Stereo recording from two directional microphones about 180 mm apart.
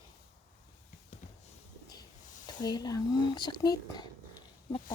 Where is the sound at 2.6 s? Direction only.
20° left (ahead or behind).